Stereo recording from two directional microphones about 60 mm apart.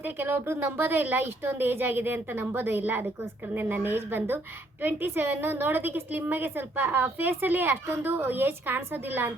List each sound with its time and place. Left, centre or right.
0.0 s a woman's voice: right